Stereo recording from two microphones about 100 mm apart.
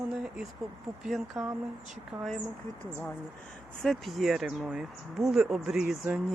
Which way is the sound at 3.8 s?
5° left (ahead or behind).